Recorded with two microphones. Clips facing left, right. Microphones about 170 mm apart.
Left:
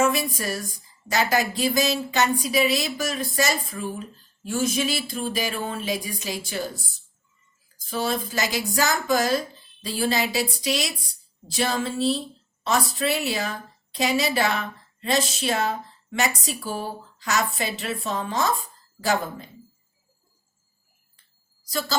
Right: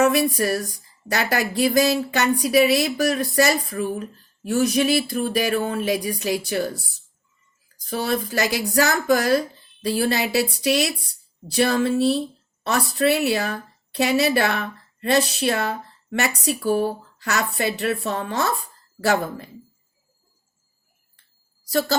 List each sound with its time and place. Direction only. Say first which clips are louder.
0.0 s speech: right 5 dB; 65° right (ahead or behind)
7.9 s a woman's voice: right 2 dB; 60° right (ahead or behind)
21.7 s a woman's voice: right 7 dB; 65° right (ahead or behind)